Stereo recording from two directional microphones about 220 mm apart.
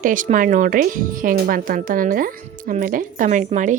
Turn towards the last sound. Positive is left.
turn(degrees=-35)  # may be behind; listen again after turning